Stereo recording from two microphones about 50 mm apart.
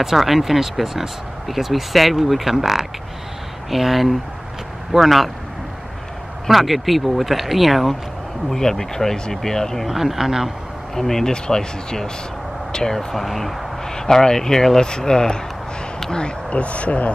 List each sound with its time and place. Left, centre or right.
0.0 s speech: centre
6.4 s speech: centre
9.8 s speech: centre
11.0 s speech: centre
13.8 s speech: centre; by 17.1 s left